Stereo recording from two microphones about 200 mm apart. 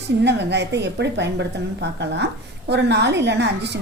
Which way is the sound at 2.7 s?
60° right (ahead or behind).